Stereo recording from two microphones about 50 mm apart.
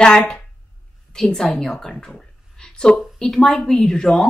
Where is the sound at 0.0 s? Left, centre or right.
Centre.